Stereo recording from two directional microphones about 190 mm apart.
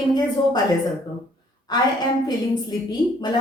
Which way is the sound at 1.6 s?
20° left (ahead or behind).